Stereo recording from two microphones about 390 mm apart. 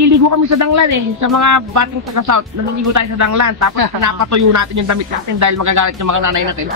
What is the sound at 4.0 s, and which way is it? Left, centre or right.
Speech, right.